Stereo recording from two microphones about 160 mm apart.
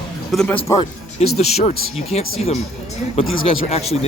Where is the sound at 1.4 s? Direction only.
40° left (ahead or behind).